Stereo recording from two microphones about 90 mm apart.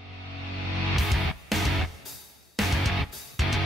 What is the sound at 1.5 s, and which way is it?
Music, centre (ahead or behind).